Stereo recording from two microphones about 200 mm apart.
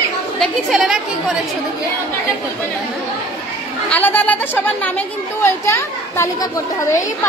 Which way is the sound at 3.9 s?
10° left (ahead or behind).